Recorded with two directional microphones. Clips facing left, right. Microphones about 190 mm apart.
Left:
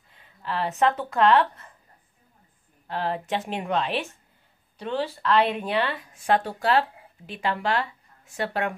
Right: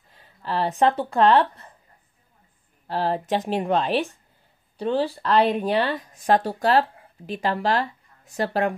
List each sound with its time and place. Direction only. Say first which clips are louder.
0.1 s speech: right 3 dB; 35° right (ahead or behind)
2.9 s speech: right 4 dB; 35° right (ahead or behind)